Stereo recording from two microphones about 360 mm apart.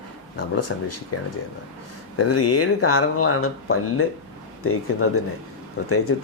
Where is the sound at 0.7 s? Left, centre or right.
Left.